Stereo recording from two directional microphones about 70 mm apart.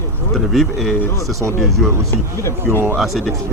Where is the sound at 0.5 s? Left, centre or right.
Centre.